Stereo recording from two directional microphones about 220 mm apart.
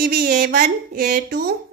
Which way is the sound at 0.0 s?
45° right (ahead or behind).